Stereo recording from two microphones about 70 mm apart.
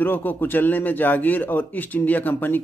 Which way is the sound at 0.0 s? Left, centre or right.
Left.